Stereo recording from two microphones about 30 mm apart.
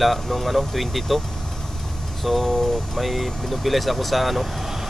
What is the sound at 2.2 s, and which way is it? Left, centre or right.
Speech, centre.